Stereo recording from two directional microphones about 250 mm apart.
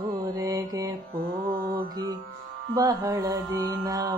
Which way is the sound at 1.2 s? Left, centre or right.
Right.